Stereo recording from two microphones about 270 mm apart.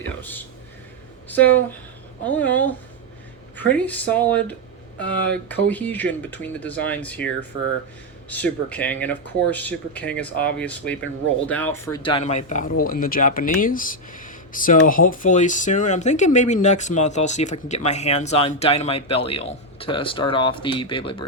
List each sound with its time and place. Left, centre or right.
0.2 s speech: centre
8.3 s speech: centre